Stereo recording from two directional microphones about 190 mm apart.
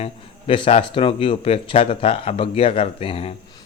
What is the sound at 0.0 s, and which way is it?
Speech, 30° left (ahead or behind).